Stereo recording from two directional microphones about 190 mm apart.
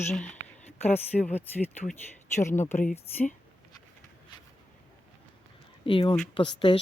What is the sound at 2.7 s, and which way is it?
Speech, 45° left (ahead or behind).